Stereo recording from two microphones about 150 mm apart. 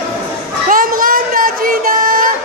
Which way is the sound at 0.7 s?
70° right (ahead or behind).